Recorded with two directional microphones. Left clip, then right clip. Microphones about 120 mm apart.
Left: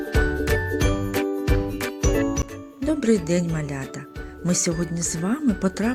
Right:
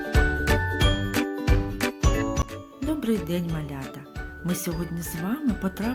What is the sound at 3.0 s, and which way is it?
Speech, 40° left (ahead or behind).